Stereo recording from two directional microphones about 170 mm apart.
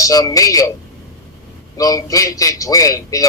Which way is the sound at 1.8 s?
20° left (ahead or behind).